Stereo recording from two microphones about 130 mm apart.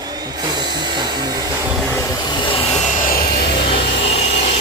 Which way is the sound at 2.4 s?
40° left (ahead or behind).